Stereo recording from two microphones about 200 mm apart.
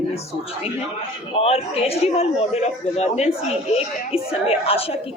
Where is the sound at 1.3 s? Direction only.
30° left (ahead or behind).